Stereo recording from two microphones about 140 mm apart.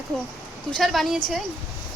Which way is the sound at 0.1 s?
5° left (ahead or behind).